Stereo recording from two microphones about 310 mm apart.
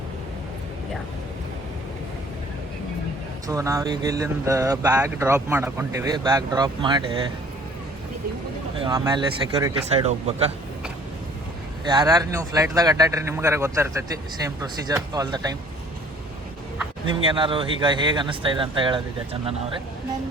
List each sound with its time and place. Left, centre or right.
3.4 s speech: centre
8.8 s speech: centre
11.9 s speech: centre
17.1 s speech: centre